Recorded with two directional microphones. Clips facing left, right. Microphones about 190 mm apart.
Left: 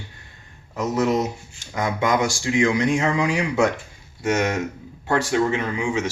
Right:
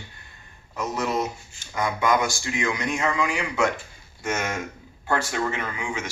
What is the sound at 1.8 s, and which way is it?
Speech, 25° left (ahead or behind).